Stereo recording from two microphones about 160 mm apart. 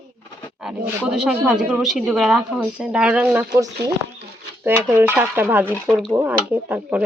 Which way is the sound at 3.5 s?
20° right (ahead or behind).